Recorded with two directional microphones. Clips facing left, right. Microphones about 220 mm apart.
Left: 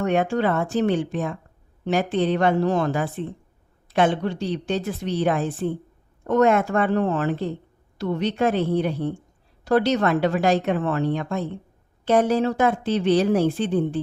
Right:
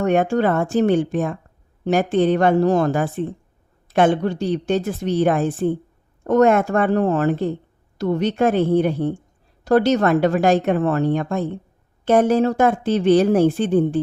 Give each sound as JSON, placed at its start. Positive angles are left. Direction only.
{"t": 0.0, "sound": "speech", "side_deg": -45}